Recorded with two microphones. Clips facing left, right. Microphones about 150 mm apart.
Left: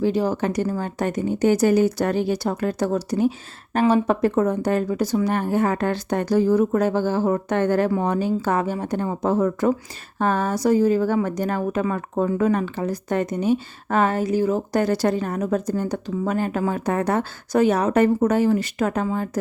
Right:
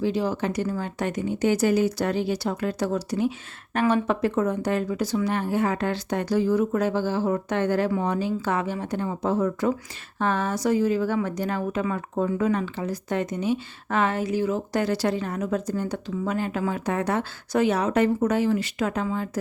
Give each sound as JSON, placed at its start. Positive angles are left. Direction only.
{"t": 0.0, "sound": "a woman's voice", "side_deg": 45}
{"t": 3.8, "sound": "a woman's voice", "side_deg": 35}